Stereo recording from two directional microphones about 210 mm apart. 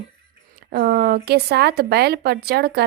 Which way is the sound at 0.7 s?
50° right (ahead or behind).